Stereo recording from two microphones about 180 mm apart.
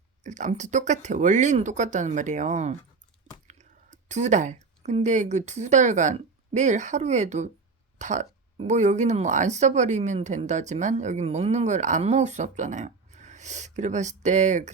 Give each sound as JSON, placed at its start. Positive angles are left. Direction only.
{"t": 0.2, "sound": "speech", "side_deg": -40}